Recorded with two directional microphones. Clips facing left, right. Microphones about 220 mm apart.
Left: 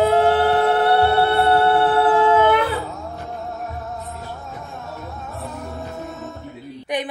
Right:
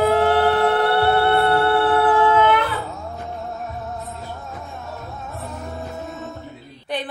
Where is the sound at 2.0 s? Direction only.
30° left (ahead or behind).